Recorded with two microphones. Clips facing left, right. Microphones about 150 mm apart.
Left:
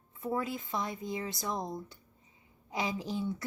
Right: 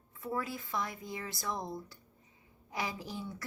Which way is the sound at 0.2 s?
20° left (ahead or behind).